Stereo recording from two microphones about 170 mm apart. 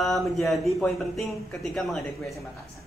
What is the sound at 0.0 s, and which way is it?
Speech, centre (ahead or behind).